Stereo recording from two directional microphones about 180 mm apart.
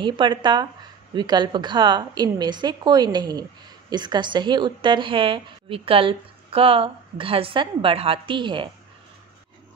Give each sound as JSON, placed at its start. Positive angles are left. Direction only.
{"t": 0.0, "sound": "a woman's voice", "side_deg": -25}